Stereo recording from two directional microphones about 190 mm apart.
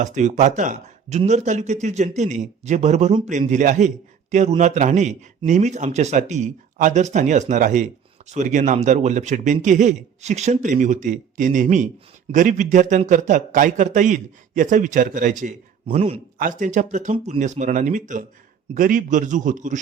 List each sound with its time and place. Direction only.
0.0 s a man's voice: 40° right (ahead or behind)
16.4 s a man's voice: 40° right (ahead or behind)